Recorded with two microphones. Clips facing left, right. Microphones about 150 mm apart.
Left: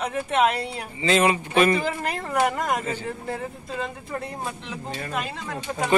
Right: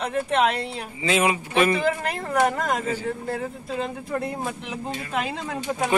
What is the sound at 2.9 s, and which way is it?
Speech, 10° right (ahead or behind).